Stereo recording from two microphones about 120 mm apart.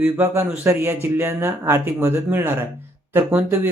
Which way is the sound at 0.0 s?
15° right (ahead or behind).